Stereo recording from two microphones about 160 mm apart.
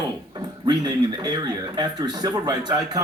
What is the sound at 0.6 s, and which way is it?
Speech, 25° right (ahead or behind).